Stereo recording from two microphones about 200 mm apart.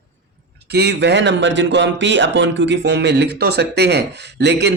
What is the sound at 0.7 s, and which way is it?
Speech, 55° right (ahead or behind).